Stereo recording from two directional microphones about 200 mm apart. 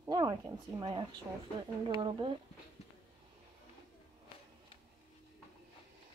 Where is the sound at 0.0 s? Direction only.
20° right (ahead or behind).